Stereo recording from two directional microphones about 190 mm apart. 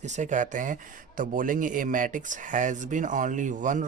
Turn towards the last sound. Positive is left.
turn(degrees=-40)  # may be behind; listen again after turning